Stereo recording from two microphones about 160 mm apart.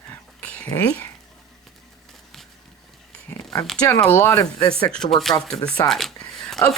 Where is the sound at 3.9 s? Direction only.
15° left (ahead or behind).